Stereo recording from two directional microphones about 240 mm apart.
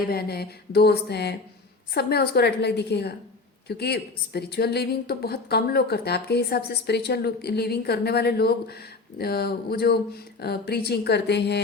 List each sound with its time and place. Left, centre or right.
0.1 s a woman's voice: left